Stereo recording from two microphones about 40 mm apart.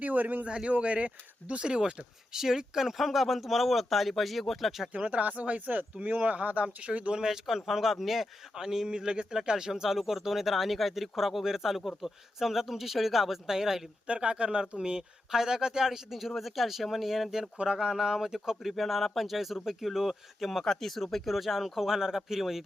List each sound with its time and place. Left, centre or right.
0.0 s a man's voice: right
0.4 s speech: right
2.3 s speech: centre
4.9 s speech: right
7.2 s speech: centre
14.1 s speech: right; by 22.6 s centre